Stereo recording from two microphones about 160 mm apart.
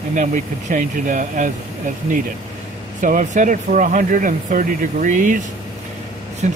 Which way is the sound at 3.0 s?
55° right (ahead or behind).